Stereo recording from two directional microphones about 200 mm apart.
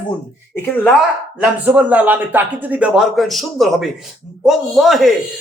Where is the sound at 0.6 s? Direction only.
5° left (ahead or behind).